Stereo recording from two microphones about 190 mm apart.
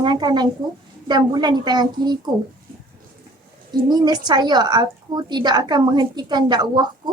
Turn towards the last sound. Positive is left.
turn(degrees=-25)  # may be behind; listen again after turning